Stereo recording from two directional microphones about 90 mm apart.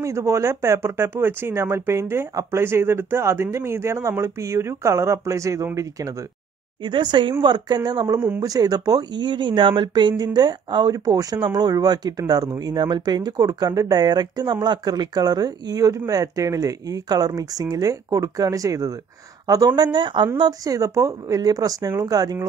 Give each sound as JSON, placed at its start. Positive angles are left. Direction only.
{"t": 0.0, "sound": "speech", "side_deg": -35}
{"t": 6.8, "sound": "speech", "side_deg": -60}
{"t": 20.3, "sound": "speech", "side_deg": -50}